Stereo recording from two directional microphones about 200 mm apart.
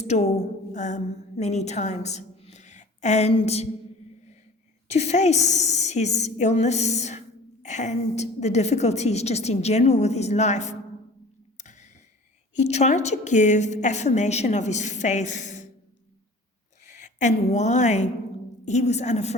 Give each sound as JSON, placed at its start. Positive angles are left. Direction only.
{"t": 0.0, "sound": "a woman's voice", "side_deg": 35}
{"t": 4.9, "sound": "a woman's voice", "side_deg": 35}
{"t": 11.5, "sound": "a sound", "side_deg": 35}
{"t": 12.5, "sound": "a woman's voice", "side_deg": 35}
{"t": 16.8, "sound": "a woman's voice", "side_deg": 40}